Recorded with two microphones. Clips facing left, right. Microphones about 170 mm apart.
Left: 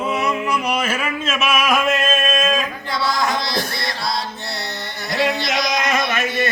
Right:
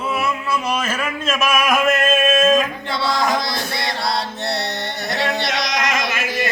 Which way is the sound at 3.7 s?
65° right (ahead or behind).